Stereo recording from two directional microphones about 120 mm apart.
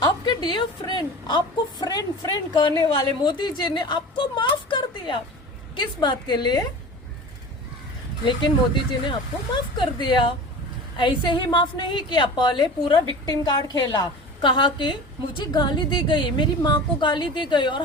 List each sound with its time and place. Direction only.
0.0 s a sound: 40° left (ahead or behind)
1.8 s a woman's voice: 30° left (ahead or behind)
2.6 s a woman's voice: 45° left (ahead or behind)
8.2 s a woman's voice: 40° left (ahead or behind)